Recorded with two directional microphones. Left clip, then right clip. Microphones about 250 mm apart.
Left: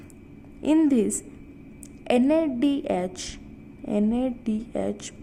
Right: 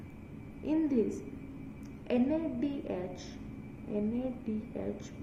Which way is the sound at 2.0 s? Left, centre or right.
Left.